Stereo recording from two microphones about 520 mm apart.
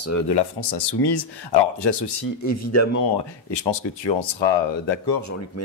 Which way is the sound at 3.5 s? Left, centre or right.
Left.